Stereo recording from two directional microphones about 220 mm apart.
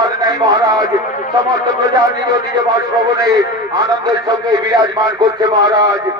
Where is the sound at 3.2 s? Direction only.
15° right (ahead or behind).